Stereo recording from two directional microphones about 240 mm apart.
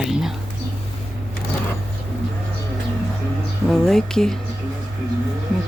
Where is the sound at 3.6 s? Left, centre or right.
Centre.